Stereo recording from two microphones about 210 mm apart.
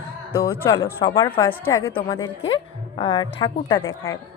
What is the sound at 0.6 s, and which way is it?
A woman's voice, 15° left (ahead or behind).